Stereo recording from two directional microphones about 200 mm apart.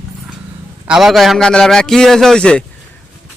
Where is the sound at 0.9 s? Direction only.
Centre (ahead or behind).